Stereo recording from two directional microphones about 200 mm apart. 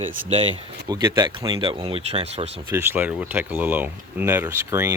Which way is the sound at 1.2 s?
25° right (ahead or behind).